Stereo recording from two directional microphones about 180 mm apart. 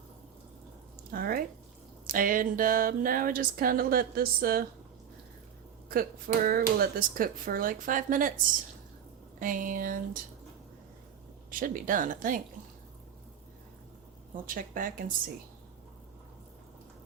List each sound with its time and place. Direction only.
1.1 s speech: 55° right (ahead or behind)
5.9 s speech: 50° right (ahead or behind)
9.4 s speech: 50° right (ahead or behind)
11.6 s speech: 50° right (ahead or behind)
14.4 s speech: 50° right (ahead or behind)